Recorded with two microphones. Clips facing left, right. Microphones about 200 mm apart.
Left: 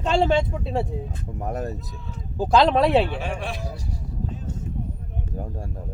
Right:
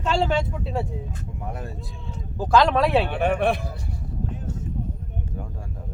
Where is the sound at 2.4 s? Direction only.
25° left (ahead or behind).